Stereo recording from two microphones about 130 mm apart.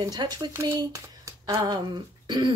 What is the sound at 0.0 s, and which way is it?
Speech, 30° right (ahead or behind).